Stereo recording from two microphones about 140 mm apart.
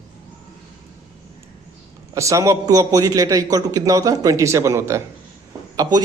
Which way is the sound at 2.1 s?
20° right (ahead or behind).